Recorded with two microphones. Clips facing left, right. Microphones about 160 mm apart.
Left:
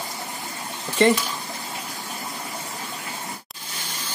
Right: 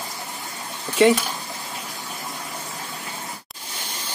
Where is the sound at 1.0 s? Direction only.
5° right (ahead or behind).